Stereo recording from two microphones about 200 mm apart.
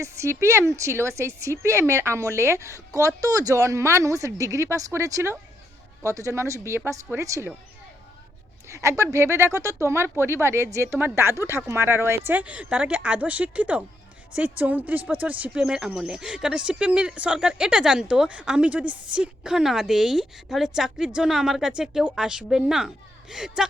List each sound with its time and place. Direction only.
0.0 s speech: 15° right (ahead or behind)
8.6 s speech: 15° right (ahead or behind)